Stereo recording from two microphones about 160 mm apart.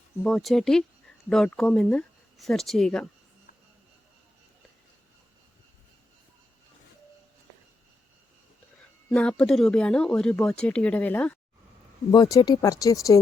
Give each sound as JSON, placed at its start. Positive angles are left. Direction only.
{"t": 0.3, "sound": "speech", "side_deg": 0}
{"t": 9.0, "sound": "speech", "side_deg": 5}
{"t": 12.1, "sound": "speech", "side_deg": 25}